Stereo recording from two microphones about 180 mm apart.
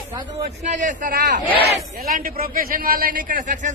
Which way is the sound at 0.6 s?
45° right (ahead or behind).